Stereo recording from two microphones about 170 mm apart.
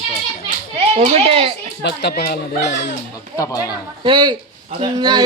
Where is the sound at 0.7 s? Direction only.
35° right (ahead or behind).